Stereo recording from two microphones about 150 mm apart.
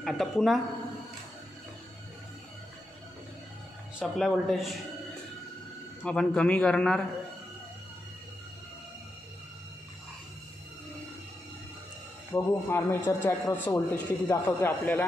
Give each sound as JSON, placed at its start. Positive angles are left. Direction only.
{"t": 0.0, "sound": "speech", "side_deg": 0}
{"t": 4.0, "sound": "speech", "side_deg": 0}
{"t": 6.0, "sound": "a man's voice", "side_deg": 5}
{"t": 12.3, "sound": "a man's voice", "side_deg": 15}